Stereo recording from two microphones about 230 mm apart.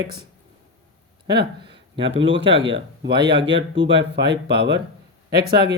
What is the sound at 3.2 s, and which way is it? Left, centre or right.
Speech, right.